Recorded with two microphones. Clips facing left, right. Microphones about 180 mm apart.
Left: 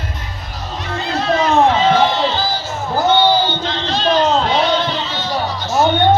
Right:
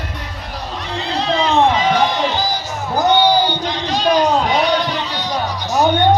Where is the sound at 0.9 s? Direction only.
15° right (ahead or behind).